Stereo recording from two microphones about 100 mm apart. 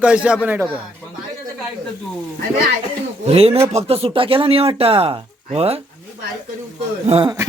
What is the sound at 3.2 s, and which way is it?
Speech, 85° right.